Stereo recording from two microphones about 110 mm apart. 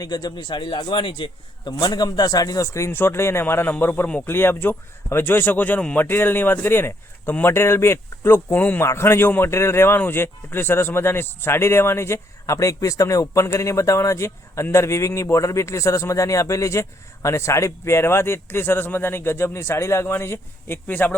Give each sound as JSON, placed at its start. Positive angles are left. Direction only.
{"t": 0.0, "sound": "a man's voice", "side_deg": 40}